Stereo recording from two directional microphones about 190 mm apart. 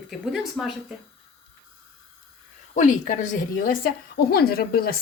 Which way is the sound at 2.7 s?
40° left (ahead or behind).